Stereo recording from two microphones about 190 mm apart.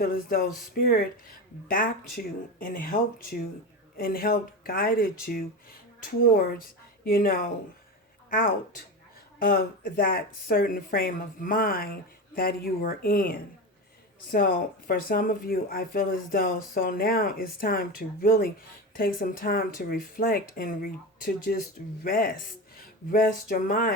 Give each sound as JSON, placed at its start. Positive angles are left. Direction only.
{"t": 0.0, "sound": "speech", "side_deg": 50}